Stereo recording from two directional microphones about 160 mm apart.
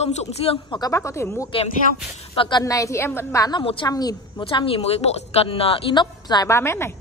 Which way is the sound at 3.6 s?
35° left (ahead or behind).